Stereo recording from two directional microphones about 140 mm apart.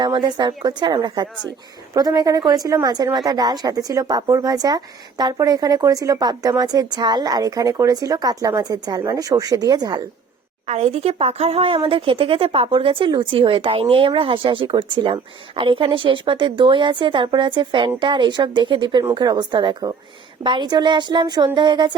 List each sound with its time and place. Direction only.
0.0 s a woman's voice: 30° right (ahead or behind)
10.7 s speech: 50° right (ahead or behind); by 21.9 s 30° right (ahead or behind)